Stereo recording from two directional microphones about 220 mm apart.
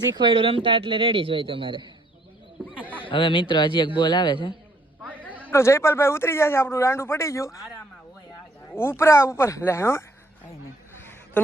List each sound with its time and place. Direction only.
0.1 s a man's voice: 20° right (ahead or behind)
3.0 s a man's voice: 25° left (ahead or behind)
8.7 s speech: 10° left (ahead or behind)
10.9 s a sound: 10° left (ahead or behind)